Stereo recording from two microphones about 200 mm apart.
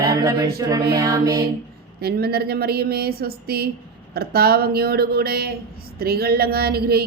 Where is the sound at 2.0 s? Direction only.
50° right (ahead or behind).